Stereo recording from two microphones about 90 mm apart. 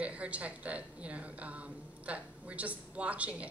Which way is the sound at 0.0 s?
15° right (ahead or behind).